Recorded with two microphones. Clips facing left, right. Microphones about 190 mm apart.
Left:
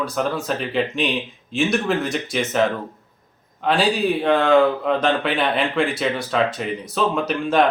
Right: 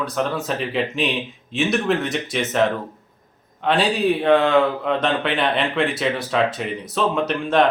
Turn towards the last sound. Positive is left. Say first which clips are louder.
# even
turn(degrees=0)  # may be behind; listen again after turning